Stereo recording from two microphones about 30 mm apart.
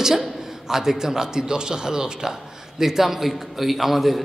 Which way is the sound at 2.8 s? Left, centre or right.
Centre.